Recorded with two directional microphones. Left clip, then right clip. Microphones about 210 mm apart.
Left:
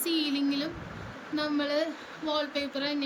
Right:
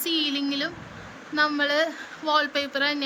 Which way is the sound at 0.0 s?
5° left (ahead or behind).